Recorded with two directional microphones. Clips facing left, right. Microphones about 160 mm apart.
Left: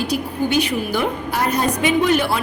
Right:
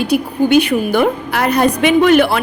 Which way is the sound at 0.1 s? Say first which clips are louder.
Right 11 dB; 60° right (ahead or behind).